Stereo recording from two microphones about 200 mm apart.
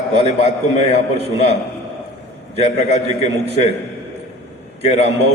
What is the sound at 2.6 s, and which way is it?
Speech, 35° left (ahead or behind).